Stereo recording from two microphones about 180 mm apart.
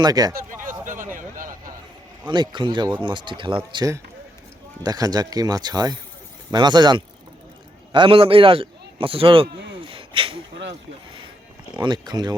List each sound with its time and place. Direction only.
0.0 s speech: 20° right (ahead or behind)
0.6 s a sound: 50° right (ahead or behind)
2.2 s a man's voice: 25° right (ahead or behind)
11.8 s speech: 25° right (ahead or behind)